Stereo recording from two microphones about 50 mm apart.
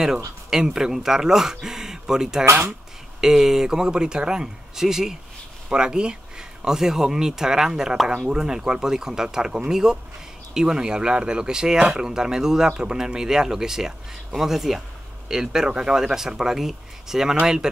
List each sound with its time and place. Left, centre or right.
0.5 s speech: centre